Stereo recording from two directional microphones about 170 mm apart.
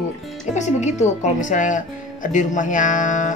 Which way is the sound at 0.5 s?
45° left (ahead or behind).